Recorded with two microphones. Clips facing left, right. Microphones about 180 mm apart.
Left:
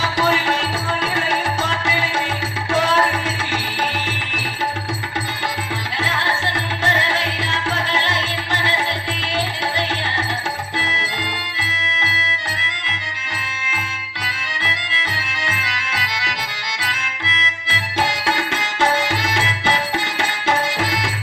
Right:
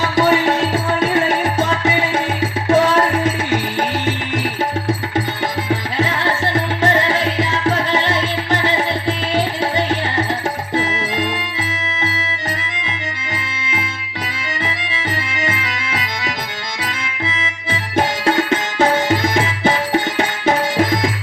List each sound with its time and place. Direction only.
0.0 s music: 45° right (ahead or behind)
6.0 s music: 50° right (ahead or behind)
17.2 s music: 50° right (ahead or behind)